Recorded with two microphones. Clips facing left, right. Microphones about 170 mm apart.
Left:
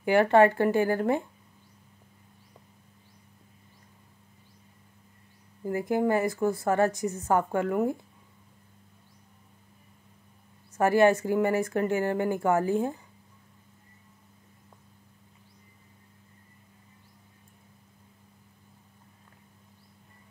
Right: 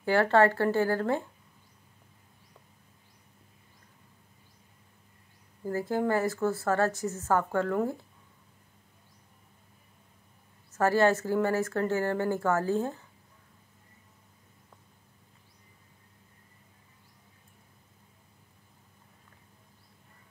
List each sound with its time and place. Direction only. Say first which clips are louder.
0.0 s a woman's voice: left 3 dB; 15° left (ahead or behind)
5.7 s a woman's voice: left 3 dB; 15° left (ahead or behind)
10.8 s a woman's voice: left 3 dB; 15° left (ahead or behind)